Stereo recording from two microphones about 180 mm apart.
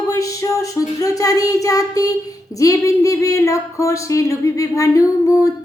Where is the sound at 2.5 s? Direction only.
20° left (ahead or behind).